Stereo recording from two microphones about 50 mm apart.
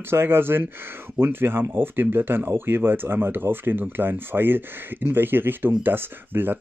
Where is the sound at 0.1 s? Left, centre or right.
Right.